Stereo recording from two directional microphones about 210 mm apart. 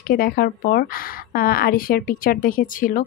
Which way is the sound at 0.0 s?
45° left (ahead or behind).